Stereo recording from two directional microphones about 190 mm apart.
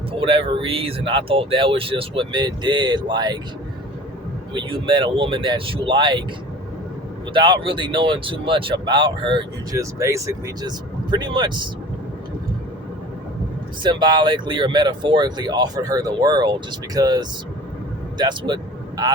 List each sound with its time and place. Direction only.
0.1 s speech: 25° right (ahead or behind)
4.5 s speech: 25° right (ahead or behind)
7.3 s speech: 25° right (ahead or behind)
13.8 s speech: 25° right (ahead or behind)